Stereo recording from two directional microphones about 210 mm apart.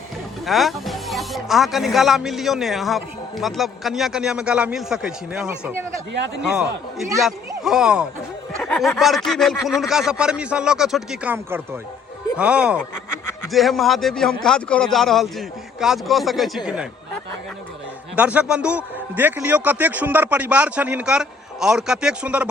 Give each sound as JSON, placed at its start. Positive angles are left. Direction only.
{"t": 0.4, "sound": "speech", "side_deg": 0}
{"t": 6.1, "sound": "a man's voice", "side_deg": -55}
{"t": 6.4, "sound": "speech", "side_deg": -5}
{"t": 18.2, "sound": "a man's voice", "side_deg": -5}